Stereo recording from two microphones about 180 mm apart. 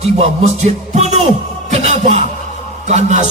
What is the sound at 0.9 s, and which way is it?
Music, 40° right (ahead or behind).